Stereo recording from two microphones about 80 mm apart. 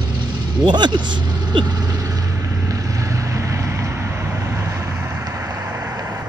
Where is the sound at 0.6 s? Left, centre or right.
Right.